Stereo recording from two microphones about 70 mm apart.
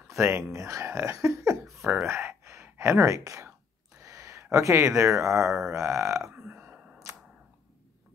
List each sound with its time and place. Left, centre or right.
0.1 s speech: right
2.0 s gasp: right
4.0 s speech: right
6.3 s burping: right